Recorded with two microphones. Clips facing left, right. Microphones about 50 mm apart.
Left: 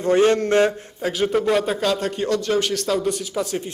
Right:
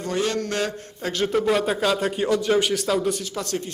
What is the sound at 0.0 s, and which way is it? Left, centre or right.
Mantra, left.